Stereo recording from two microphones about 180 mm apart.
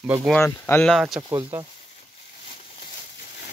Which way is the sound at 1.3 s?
15° right (ahead or behind).